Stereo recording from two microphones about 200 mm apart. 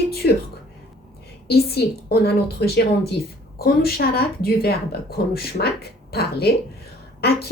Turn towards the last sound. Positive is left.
turn(degrees=50)  # may be behind; listen again after turning